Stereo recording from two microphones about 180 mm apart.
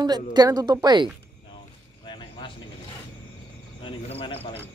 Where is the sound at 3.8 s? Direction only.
30° left (ahead or behind).